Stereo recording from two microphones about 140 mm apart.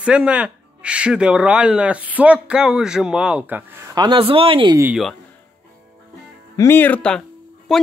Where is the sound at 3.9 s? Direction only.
30° right (ahead or behind).